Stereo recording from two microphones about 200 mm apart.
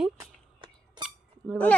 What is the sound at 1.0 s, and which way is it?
Squeak, 5° left (ahead or behind).